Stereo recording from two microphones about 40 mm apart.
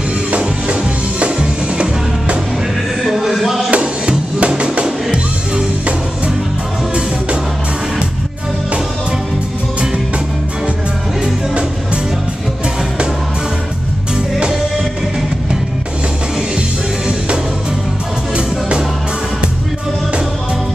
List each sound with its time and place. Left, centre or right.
0.3 s music: right
3.1 s a sound: centre
3.8 s music: right